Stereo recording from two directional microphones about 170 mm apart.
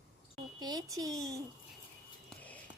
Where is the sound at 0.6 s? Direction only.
25° right (ahead or behind).